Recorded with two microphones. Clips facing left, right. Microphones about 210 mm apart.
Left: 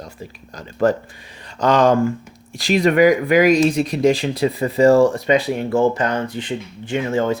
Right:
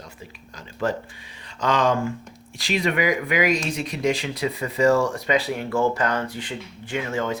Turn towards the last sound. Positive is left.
turn(degrees=30)  # may be behind; listen again after turning